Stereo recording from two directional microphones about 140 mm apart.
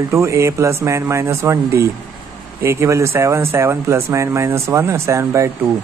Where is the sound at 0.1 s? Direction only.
20° right (ahead or behind).